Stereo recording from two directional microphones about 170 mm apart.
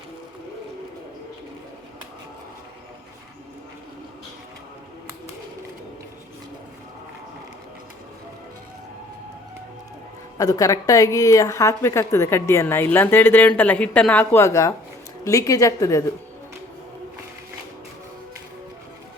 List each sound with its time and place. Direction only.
10.3 s a woman's voice: 20° left (ahead or behind)